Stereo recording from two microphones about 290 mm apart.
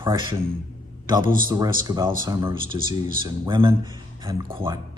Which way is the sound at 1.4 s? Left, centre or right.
Centre.